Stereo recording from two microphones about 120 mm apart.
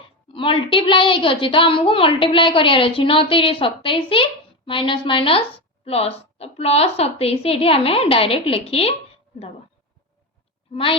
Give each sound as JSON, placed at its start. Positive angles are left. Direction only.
{"t": 0.3, "sound": "a woman's voice", "side_deg": 45}